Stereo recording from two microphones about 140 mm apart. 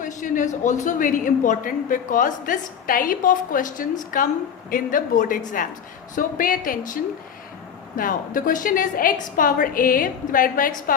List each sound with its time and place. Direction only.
0.0 s a woman's voice: 65° left (ahead or behind); by 10.9 s 85° left